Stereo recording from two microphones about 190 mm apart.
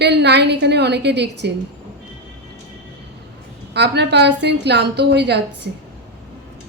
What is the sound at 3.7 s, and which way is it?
A woman's voice, 60° right (ahead or behind).